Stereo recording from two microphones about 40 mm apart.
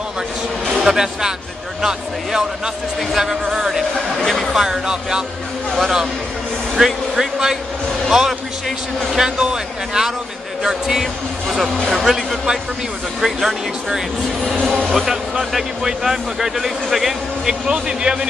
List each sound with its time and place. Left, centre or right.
0.8 s speech: centre
4.3 s speech: centre
4.6 s speech: centre
6.7 s speech: centre
11.4 s speech: centre
17.5 s speech: centre